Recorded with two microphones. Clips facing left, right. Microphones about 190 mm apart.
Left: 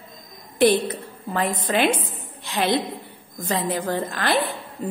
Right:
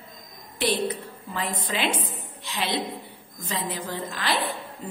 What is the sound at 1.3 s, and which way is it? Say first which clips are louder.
A woman's voice: left 7 dB; 55° left (ahead or behind).